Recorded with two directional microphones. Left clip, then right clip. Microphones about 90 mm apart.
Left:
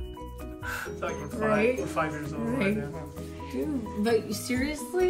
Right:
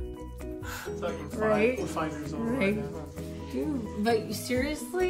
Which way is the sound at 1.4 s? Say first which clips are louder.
Even; 25° right (ahead or behind).